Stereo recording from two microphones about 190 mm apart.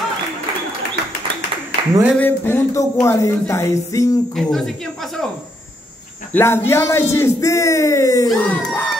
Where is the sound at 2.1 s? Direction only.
10° left (ahead or behind).